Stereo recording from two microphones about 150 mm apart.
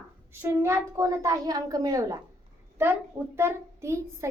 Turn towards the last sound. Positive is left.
turn(degrees=-20)  # may be behind; listen again after turning